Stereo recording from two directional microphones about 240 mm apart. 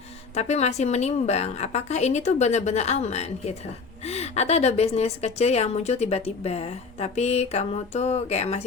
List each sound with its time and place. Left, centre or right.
0.3 s a woman's voice: left